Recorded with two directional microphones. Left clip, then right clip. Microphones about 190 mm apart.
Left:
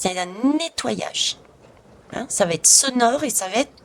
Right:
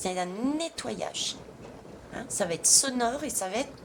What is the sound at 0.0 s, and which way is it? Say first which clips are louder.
A woman's voice: left 8 dB; 40° left (ahead or behind).